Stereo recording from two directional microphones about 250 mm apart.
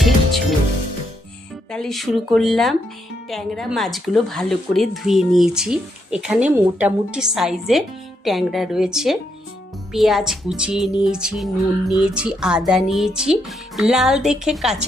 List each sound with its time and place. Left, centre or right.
1.7 s speech: centre